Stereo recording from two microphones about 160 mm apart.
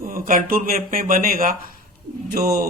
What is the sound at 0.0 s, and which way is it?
Speech, 60° right (ahead or behind).